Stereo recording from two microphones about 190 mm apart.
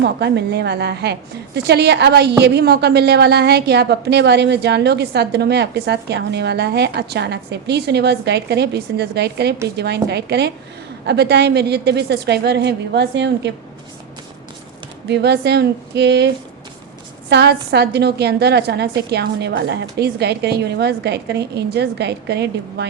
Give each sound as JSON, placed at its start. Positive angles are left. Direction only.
{"t": 0.0, "sound": "a woman's voice", "side_deg": -60}
{"t": 15.0, "sound": "a woman's voice", "side_deg": -65}